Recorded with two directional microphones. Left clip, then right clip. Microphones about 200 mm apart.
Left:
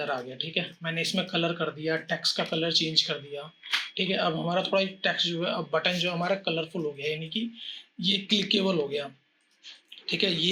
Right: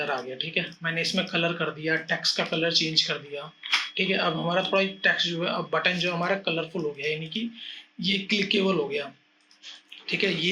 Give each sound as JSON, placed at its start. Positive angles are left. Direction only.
{"t": 0.0, "sound": "speech", "side_deg": 25}
{"t": 10.1, "sound": "speech", "side_deg": 30}